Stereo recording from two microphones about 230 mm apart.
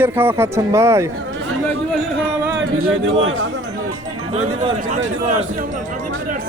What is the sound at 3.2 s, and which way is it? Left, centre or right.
Speech, right.